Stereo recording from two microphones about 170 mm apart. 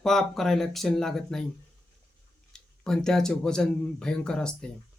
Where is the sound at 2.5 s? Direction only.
5° left (ahead or behind).